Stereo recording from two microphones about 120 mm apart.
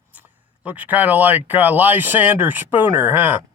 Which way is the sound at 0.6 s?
10° right (ahead or behind).